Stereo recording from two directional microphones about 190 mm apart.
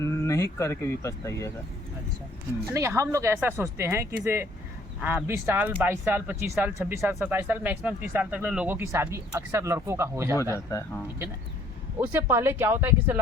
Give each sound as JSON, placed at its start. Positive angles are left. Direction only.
{"t": 0.0, "sound": "speech", "side_deg": 15}
{"t": 2.7, "sound": "speech", "side_deg": -15}
{"t": 10.5, "sound": "speech", "side_deg": 15}
{"t": 11.9, "sound": "speech", "side_deg": -10}